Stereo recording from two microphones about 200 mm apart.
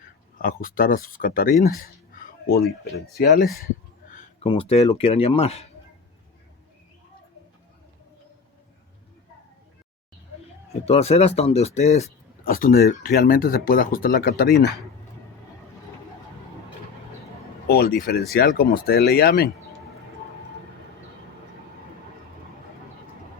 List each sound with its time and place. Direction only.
0.3 s speech: 45° left (ahead or behind)
1.7 s a sound: 45° left (ahead or behind)
4.1 s a sound: 40° left (ahead or behind)
4.4 s speech: 30° left (ahead or behind)
10.7 s speech: 30° left (ahead or behind); by 14.5 s 45° left (ahead or behind)
17.7 s speech: 50° left (ahead or behind)